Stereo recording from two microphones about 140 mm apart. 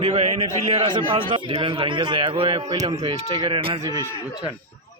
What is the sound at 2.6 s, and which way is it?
A man's voice, 25° right (ahead or behind).